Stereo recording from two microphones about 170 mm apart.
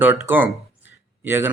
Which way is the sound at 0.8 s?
10° right (ahead or behind).